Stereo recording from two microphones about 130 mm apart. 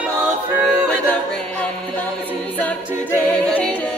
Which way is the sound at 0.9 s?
10° left (ahead or behind).